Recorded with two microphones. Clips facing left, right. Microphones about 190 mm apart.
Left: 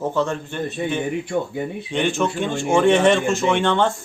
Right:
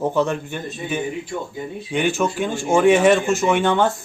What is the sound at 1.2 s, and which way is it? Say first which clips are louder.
Speech: left 5 dB; 60° left (ahead or behind).